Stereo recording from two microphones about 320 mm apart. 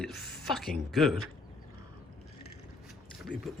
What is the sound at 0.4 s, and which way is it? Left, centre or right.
Speech, centre.